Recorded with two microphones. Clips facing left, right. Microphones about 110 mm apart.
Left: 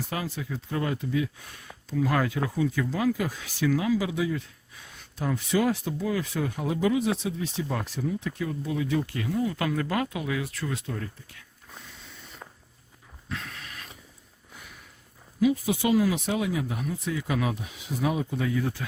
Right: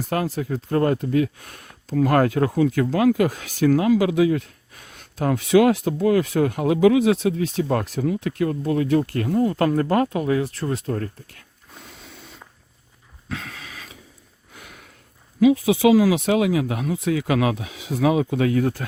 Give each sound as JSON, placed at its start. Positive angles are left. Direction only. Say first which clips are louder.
{"t": 0.1, "sound": "speech", "louder": "right 12 dB", "side_deg": -50}
{"t": 13.2, "sound": "a sound", "louder": "right 4 dB", "side_deg": -90}
{"t": 14.5, "sound": "snort", "louder": "right 4 dB", "side_deg": -75}
{"t": 15.4, "sound": "speech", "louder": "right 8 dB", "side_deg": -90}